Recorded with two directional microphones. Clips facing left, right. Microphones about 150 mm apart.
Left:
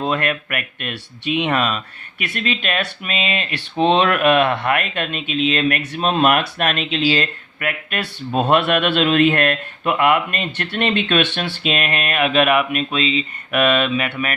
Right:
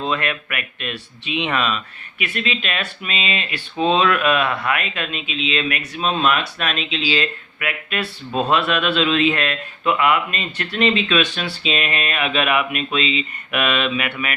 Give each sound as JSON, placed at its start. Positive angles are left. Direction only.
{"t": 0.1, "sound": "speech", "side_deg": 45}